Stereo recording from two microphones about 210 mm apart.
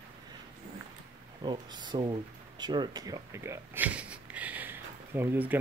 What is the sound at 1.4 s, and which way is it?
Speech, 20° right (ahead or behind).